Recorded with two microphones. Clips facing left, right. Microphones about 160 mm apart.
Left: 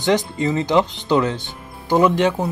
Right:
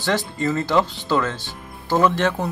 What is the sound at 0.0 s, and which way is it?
Speech, 20° left (ahead or behind).